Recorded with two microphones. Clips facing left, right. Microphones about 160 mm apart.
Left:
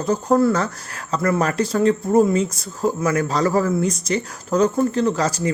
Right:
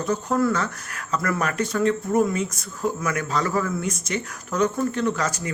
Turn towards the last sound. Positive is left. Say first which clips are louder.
# left 5 dB
turn(degrees=30)  # may be behind; listen again after turning